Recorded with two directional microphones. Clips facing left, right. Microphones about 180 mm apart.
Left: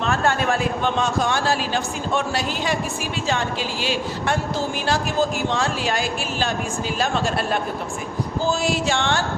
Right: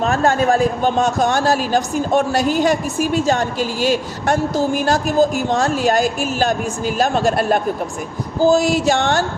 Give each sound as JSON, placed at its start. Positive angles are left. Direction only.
{"t": 0.0, "sound": "a man's voice", "side_deg": -40}
{"t": 8.4, "sound": "music", "side_deg": -40}